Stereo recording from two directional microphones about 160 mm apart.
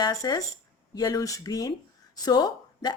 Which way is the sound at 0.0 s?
25° left (ahead or behind).